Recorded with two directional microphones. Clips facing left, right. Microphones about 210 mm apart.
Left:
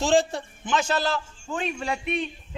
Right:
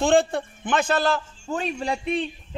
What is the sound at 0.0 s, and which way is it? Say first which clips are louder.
A man's voice: right 2 dB; 55° right (ahead or behind).